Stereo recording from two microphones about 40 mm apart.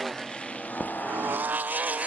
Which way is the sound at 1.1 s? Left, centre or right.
Right.